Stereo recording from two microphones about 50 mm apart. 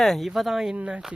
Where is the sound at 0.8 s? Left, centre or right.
Right.